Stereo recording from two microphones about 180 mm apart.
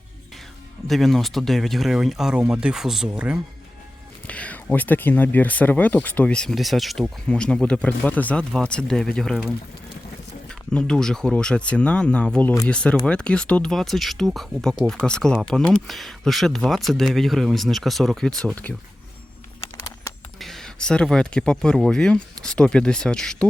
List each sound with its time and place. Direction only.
0.9 s speech: centre (ahead or behind)
4.3 s speech: 5° left (ahead or behind)
10.5 s speech: 5° left (ahead or behind)
20.1 s a sound: 15° left (ahead or behind)
20.4 s speech: centre (ahead or behind)